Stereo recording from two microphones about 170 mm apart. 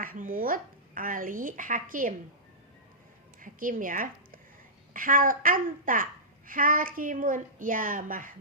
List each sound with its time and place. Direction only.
0.0 s speech: 55° right (ahead or behind)
3.4 s a woman's voice: 50° right (ahead or behind)